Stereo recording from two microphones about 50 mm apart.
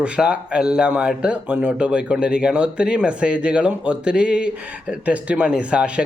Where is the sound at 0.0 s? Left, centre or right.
Centre.